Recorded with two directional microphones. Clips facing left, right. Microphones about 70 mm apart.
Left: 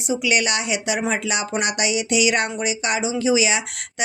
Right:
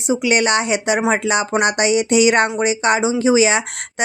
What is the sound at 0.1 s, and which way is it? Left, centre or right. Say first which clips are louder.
Speech: right 5 dB; right.